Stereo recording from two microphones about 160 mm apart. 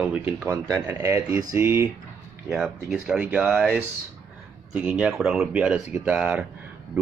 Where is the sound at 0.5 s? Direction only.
20° right (ahead or behind).